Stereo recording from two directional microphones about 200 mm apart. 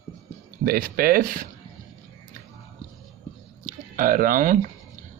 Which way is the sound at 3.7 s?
45° right (ahead or behind).